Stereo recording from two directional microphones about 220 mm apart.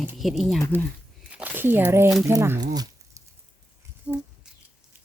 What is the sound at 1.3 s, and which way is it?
Crumpling, 5° right (ahead or behind).